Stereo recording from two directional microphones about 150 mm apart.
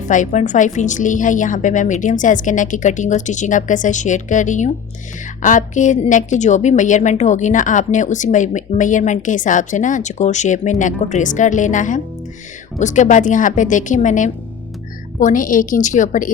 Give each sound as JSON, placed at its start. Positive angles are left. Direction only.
{"t": 0.0, "sound": "a woman's voice", "side_deg": 55}